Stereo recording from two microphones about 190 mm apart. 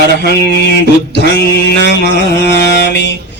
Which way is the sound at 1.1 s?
60° left (ahead or behind).